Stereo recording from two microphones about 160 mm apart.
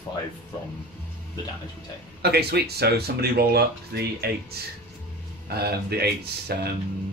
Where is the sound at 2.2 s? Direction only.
90° right.